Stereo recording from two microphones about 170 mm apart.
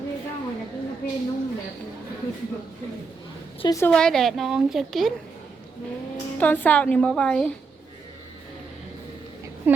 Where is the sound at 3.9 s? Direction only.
5° left (ahead or behind).